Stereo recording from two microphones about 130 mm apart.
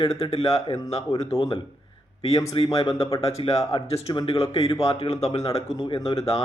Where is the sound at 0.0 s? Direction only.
50° left (ahead or behind).